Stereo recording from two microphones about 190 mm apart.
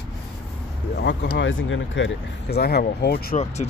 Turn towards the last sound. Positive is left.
turn(degrees=55)  # may be behind; listen again after turning